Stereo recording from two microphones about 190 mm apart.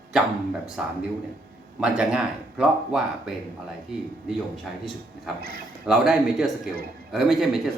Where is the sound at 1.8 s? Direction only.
5° right (ahead or behind).